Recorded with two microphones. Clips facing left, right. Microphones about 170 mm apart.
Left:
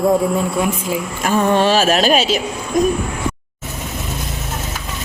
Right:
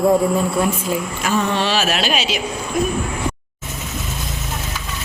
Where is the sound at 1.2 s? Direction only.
50° left (ahead or behind).